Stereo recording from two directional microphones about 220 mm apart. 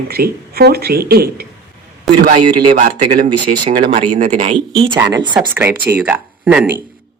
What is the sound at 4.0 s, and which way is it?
Speech, 35° right (ahead or behind).